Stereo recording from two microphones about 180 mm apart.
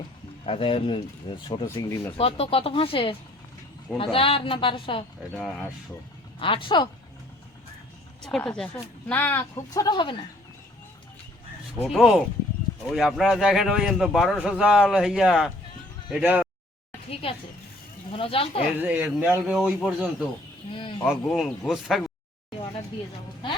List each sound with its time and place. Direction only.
0.4 s speech: 30° left (ahead or behind)
1.6 s speech: 15° left (ahead or behind)
2.1 s a woman's voice: 30° left (ahead or behind)
6.4 s a woman's voice: 30° left (ahead or behind)
8.2 s speech: 5° left (ahead or behind); by 10.2 s 25° left (ahead or behind)
11.9 s a man's voice: 5° right (ahead or behind)
17.1 s speech: 30° left (ahead or behind)
18.8 s a man's voice: 10° right (ahead or behind)